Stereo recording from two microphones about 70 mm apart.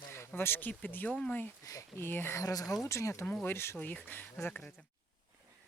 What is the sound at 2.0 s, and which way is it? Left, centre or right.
Speech, left.